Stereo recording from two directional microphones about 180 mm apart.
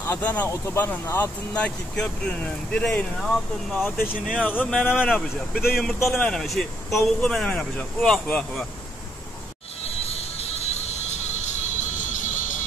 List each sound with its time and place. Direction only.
0.0 s speech: 10° left (ahead or behind)
4.1 s speech: 5° right (ahead or behind)
4.5 s speech: 5° left (ahead or behind)
9.8 s music: 35° left (ahead or behind)